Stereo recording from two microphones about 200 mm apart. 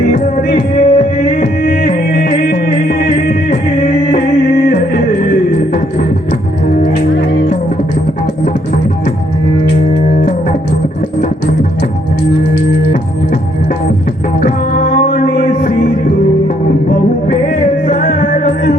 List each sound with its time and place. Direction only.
0.1 s music: 45° left (ahead or behind)
14.4 s music: 45° left (ahead or behind)
17.8 s music: 45° left (ahead or behind)